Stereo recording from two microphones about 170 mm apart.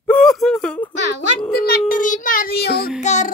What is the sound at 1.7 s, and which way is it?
Child singing, 50° left (ahead or behind).